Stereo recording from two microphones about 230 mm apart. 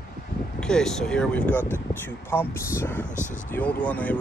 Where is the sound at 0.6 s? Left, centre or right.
Centre.